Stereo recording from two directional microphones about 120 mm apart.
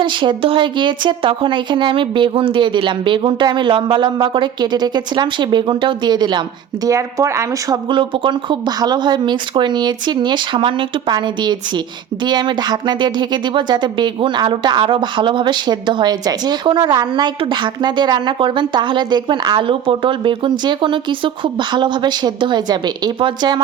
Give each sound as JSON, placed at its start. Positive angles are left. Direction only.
{"t": 0.0, "sound": "speech", "side_deg": -40}
{"t": 6.8, "sound": "speech", "side_deg": -25}
{"t": 7.9, "sound": "speech", "side_deg": -45}